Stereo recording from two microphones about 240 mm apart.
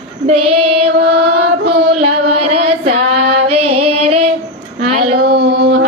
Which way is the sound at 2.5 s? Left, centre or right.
Right.